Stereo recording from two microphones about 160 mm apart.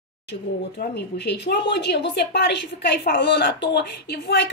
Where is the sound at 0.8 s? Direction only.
90° left.